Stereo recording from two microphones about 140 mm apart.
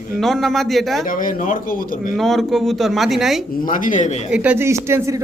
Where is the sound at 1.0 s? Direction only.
80° left.